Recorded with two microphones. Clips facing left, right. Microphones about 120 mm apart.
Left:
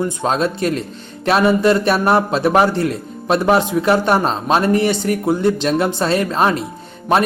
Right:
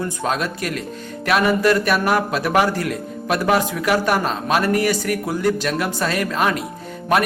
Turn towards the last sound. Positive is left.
turn(degrees=25)  # may be behind; listen again after turning